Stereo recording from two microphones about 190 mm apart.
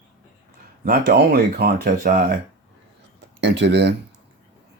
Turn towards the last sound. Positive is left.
turn(degrees=-65)  # may be behind; listen again after turning